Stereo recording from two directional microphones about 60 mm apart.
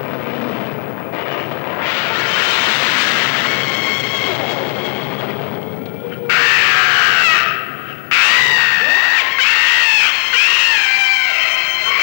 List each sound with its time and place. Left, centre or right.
1.8 s vehicle: left
6.2 s crow: left
8.1 s screaming: left